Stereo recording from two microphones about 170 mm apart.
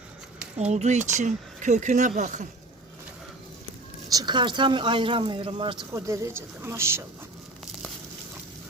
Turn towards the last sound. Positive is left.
turn(degrees=-15)  # may be behind; listen again after turning